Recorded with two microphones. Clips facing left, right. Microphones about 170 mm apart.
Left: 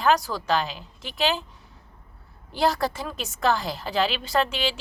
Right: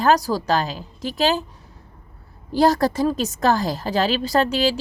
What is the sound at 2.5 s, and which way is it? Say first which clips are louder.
Speech: right 6 dB; 40° right (ahead or behind).